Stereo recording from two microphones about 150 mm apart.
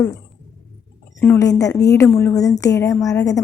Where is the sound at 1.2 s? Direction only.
20° left (ahead or behind).